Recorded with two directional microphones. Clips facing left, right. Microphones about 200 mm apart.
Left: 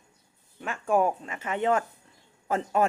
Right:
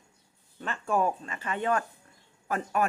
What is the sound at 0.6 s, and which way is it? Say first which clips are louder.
Speech: left 3 dB; 10° left (ahead or behind).